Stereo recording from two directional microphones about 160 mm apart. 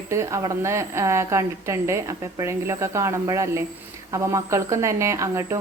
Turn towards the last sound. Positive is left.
turn(degrees=-20)  # may be behind; listen again after turning